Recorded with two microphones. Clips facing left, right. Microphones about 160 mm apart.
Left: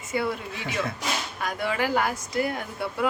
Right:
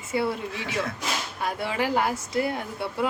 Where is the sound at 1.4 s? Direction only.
30° right (ahead or behind).